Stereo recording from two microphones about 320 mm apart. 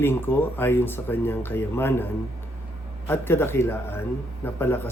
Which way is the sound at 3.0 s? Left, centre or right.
Centre.